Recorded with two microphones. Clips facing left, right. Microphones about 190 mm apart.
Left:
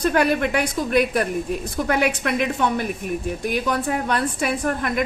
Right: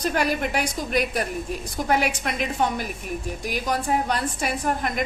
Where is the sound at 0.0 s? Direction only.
55° left (ahead or behind).